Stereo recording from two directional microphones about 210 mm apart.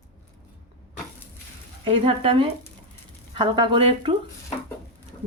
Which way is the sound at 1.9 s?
25° right (ahead or behind).